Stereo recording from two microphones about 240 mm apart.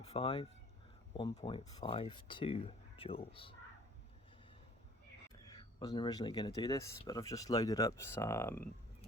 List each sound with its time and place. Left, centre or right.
0.0 s speech: left
5.5 s speech: centre